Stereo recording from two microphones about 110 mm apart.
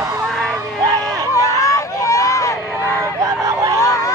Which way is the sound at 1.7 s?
30° left (ahead or behind).